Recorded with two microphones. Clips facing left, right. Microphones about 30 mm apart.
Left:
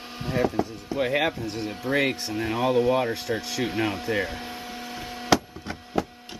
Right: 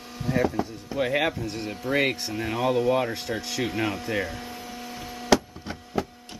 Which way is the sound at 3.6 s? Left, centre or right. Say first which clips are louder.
Left 1 dB; centre.